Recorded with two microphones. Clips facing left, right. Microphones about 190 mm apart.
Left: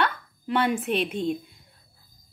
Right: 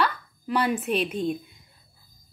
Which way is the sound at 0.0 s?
Centre (ahead or behind).